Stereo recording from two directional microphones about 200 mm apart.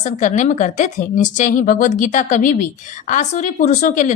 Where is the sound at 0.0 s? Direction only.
40° left (ahead or behind).